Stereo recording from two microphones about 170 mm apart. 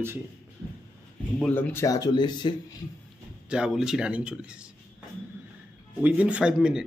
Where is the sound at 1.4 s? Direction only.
10° left (ahead or behind); by 2.5 s 25° left (ahead or behind).